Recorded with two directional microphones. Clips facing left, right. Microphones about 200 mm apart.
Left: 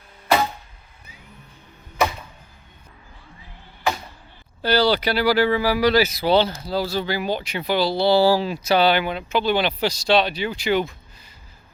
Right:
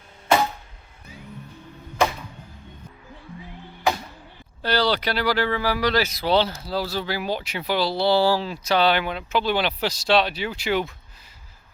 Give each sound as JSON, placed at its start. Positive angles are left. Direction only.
{"t": 4.6, "sound": "speech", "side_deg": 0}